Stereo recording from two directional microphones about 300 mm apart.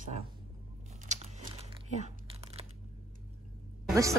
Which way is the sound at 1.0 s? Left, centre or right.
Right.